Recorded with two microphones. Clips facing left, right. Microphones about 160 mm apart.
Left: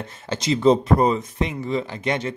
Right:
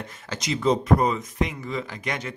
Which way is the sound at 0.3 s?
30° left (ahead or behind).